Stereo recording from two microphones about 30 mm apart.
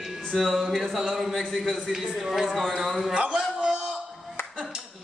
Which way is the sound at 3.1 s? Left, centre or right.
Right.